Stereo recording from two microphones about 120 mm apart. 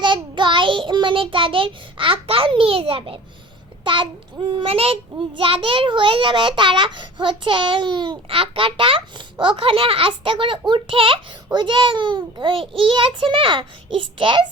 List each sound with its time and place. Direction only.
0.0 s child singing: 40° right (ahead or behind)
3.8 s a child's voice: 45° right (ahead or behind)